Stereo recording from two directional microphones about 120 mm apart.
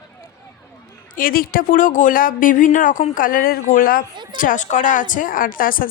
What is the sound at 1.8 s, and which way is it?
Speech, 90° left.